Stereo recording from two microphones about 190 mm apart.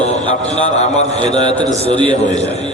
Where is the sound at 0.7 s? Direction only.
35° left (ahead or behind).